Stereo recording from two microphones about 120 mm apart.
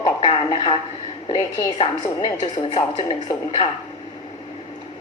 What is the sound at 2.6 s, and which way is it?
A woman's voice, 55° left (ahead or behind).